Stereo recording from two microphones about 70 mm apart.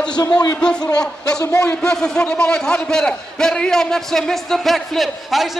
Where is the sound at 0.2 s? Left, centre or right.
Left.